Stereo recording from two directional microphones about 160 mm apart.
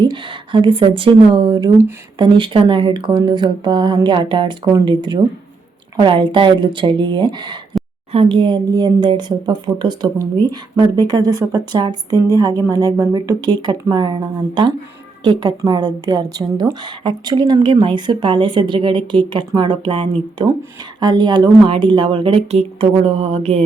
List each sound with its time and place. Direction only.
0.0 s a woman's voice: 30° right (ahead or behind)